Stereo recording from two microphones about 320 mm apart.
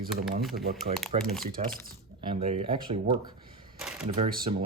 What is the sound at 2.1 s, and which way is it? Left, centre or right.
Speech, centre.